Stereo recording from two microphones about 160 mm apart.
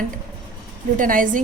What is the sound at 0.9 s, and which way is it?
Speech, 55° right (ahead or behind).